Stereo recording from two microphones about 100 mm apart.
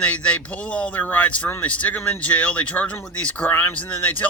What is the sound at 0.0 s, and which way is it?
Speech, 10° left (ahead or behind).